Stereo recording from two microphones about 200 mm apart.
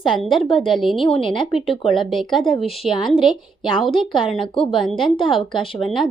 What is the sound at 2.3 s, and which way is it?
Speech, 25° left (ahead or behind).